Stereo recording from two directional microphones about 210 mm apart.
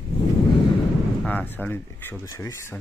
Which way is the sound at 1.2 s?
10° left (ahead or behind).